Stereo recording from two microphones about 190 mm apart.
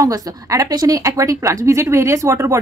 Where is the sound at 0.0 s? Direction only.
20° right (ahead or behind).